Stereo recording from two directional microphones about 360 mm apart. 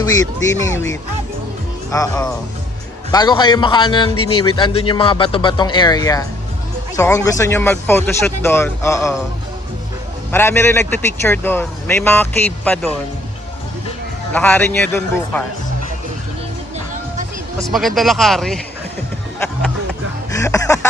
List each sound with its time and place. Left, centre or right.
0.0 s speech: centre
10.3 s a man's voice: centre
14.3 s a man's voice: centre
16.7 s music: right
17.6 s a man's voice: centre
20.3 s music: centre